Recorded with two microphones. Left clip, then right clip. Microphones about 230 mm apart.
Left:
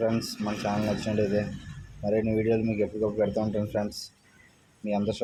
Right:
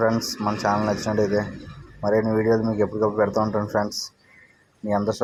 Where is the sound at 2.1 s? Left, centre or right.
Centre.